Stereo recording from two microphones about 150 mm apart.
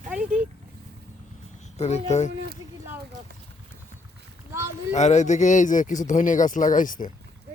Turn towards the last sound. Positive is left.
turn(degrees=65)  # may be behind; listen again after turning